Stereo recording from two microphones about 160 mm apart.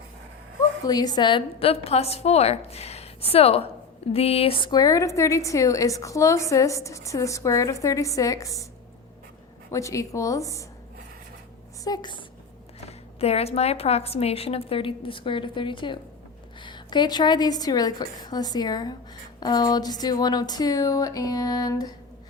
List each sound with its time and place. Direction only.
0.9 s a woman's voice: 25° left (ahead or behind)
9.7 s a woman's voice: 20° left (ahead or behind)
11.8 s a woman's voice: 25° left (ahead or behind)
12.8 s a woman's voice: 40° left (ahead or behind); by 21.9 s 25° left (ahead or behind)